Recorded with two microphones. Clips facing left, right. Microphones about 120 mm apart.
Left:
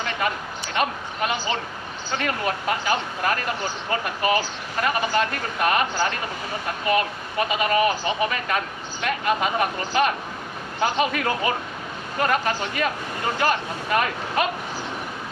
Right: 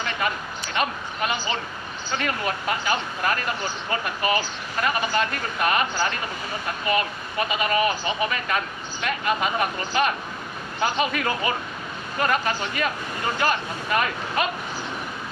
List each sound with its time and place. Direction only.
0.0 s speech: 50° left (ahead or behind)